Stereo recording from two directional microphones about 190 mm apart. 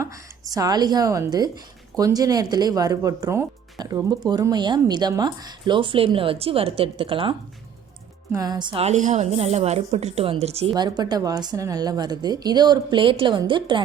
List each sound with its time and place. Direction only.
0.0 s a woman's voice: 15° right (ahead or behind)